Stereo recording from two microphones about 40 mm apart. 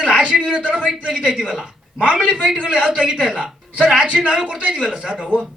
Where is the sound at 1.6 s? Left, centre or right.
Right.